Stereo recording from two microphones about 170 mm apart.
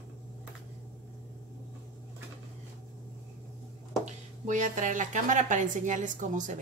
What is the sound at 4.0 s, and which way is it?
A woman's voice, 45° right (ahead or behind).